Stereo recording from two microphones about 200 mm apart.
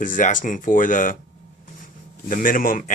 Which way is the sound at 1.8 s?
40° left (ahead or behind).